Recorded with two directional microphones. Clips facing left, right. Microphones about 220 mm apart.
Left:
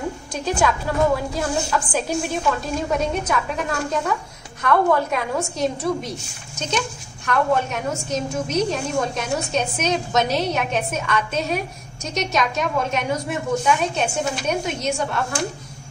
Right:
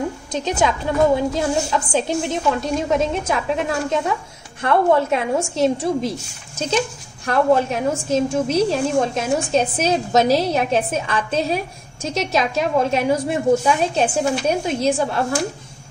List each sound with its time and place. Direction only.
0.3 s a woman's voice: 20° right (ahead or behind)
7.2 s a woman's voice: 30° right (ahead or behind)